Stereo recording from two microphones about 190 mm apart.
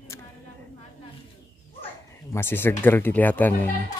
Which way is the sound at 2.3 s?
10° left (ahead or behind).